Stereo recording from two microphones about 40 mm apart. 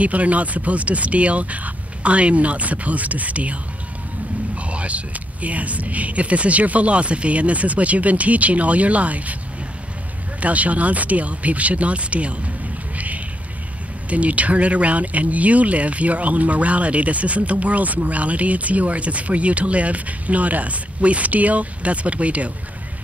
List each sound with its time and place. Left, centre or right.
0.0 s speech: right
4.6 s speech: right
10.4 s speech: right
12.9 s a sound: right
14.0 s speech: right